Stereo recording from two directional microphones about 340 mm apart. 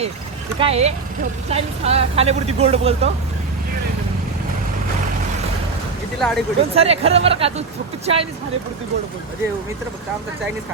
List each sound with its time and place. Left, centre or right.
0.6 s a woman's voice: centre
6.1 s speech: centre
6.6 s a woman's voice: centre